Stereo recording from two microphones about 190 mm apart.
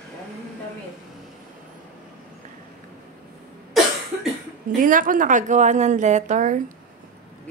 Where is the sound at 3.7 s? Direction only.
Centre (ahead or behind).